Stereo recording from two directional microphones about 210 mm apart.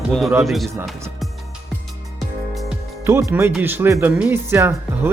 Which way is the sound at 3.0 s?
10° right (ahead or behind).